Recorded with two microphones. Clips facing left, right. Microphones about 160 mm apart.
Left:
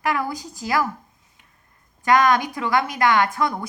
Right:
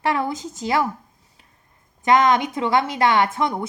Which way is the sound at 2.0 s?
25° right (ahead or behind).